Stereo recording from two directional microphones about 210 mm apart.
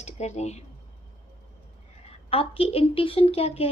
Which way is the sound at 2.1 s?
25° left (ahead or behind).